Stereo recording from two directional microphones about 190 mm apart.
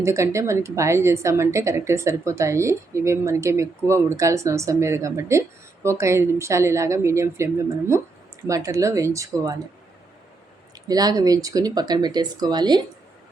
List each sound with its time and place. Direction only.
0.0 s a woman's voice: 15° right (ahead or behind)
10.8 s speech: 20° right (ahead or behind)